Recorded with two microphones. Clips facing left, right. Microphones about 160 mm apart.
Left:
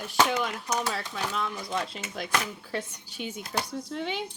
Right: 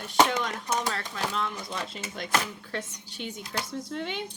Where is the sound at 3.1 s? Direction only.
Centre (ahead or behind).